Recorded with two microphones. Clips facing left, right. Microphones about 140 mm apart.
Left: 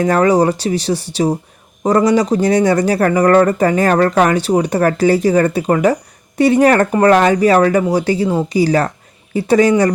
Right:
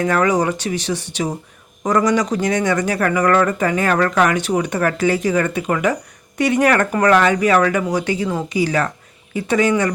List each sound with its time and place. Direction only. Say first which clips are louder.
0.0 s speech: left 5 dB; 35° left (ahead or behind)